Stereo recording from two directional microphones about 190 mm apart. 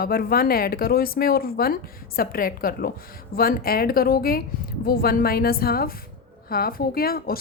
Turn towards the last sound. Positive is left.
turn(degrees=50)  # may be behind; listen again after turning